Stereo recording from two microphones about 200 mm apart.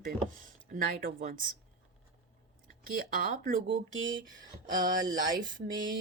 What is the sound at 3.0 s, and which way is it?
Speech, 45° right (ahead or behind).